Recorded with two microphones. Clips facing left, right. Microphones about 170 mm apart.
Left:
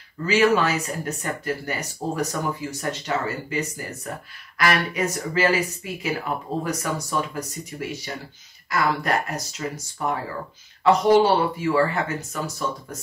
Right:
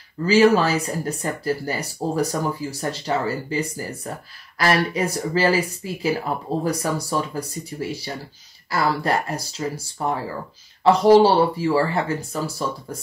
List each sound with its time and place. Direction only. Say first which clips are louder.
0.3 s speech: right 4 dB; 35° right (ahead or behind)